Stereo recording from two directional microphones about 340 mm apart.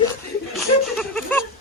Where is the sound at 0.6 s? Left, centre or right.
Centre.